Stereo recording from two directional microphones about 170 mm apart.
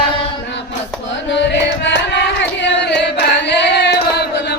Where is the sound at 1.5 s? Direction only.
90° left.